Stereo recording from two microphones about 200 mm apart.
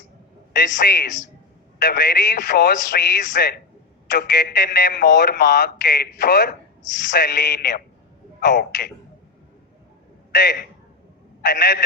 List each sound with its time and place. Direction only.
0.8 s speech: 50° left (ahead or behind)
10.3 s speech: 50° left (ahead or behind)